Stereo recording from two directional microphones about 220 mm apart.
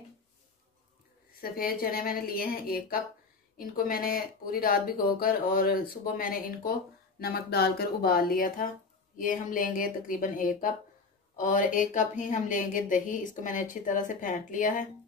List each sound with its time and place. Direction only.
1.4 s a woman's voice: 40° left (ahead or behind)